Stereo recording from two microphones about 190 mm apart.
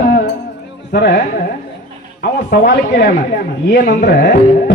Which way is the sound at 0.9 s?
55° left (ahead or behind).